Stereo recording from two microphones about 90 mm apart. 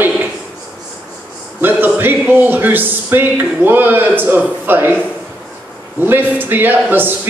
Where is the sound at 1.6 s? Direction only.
20° right (ahead or behind).